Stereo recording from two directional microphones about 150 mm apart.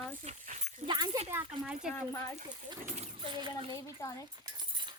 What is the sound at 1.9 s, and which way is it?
Speech, 15° left (ahead or behind).